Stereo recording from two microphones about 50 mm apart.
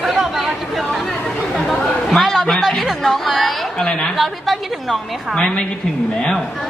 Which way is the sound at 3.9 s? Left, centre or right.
Centre.